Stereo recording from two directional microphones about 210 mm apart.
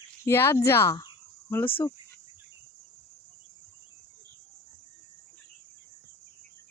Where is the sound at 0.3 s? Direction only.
10° left (ahead or behind).